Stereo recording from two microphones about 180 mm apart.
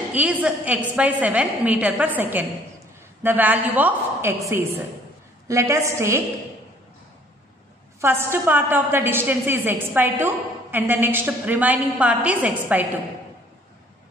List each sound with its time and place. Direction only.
0.1 s a woman's voice: 10° right (ahead or behind)
8.0 s a woman's voice: 15° right (ahead or behind)